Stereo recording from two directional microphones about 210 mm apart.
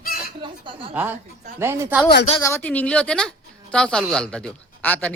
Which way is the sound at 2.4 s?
15° left (ahead or behind).